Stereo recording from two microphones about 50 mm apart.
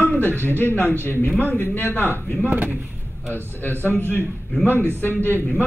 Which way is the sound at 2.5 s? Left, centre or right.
Right.